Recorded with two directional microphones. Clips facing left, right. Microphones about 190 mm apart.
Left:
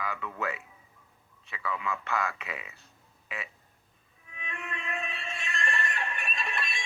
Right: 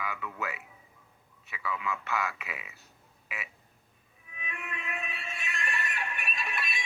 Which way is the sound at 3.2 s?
5° right (ahead or behind).